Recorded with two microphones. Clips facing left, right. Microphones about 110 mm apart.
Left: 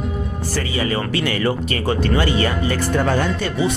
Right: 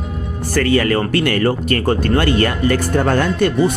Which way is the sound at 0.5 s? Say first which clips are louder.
Right 8 dB; 60° right (ahead or behind).